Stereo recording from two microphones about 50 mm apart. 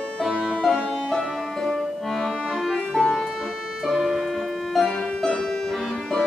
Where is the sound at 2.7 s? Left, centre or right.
Centre.